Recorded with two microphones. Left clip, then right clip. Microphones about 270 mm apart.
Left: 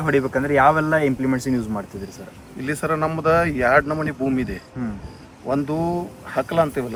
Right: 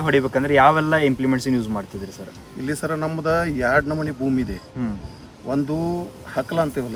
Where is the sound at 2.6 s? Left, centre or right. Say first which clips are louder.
Left 3 dB; centre.